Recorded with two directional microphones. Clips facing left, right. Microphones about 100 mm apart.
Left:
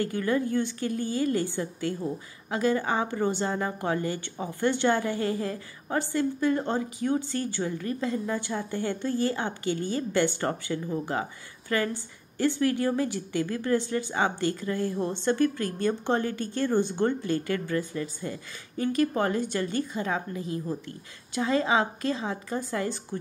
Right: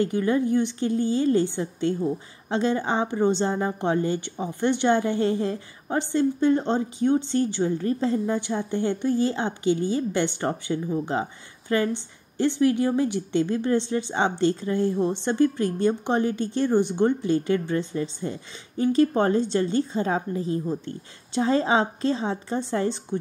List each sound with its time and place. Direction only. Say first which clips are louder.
0.0 s a woman's voice: right 4 dB; 20° right (ahead or behind)
8.4 s a woman's voice: right 5 dB; 20° right (ahead or behind)